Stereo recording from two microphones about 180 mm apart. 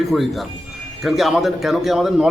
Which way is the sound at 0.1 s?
5° left (ahead or behind).